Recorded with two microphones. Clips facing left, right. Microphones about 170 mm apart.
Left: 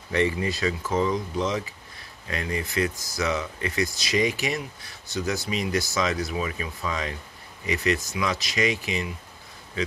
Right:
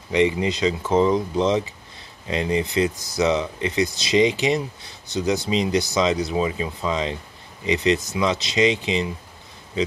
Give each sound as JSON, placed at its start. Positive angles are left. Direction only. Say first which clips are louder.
{"t": 0.1, "sound": "speech", "louder": "right 5 dB", "side_deg": -20}